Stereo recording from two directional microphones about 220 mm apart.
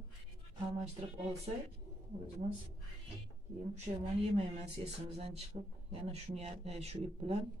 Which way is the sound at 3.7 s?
30° right (ahead or behind).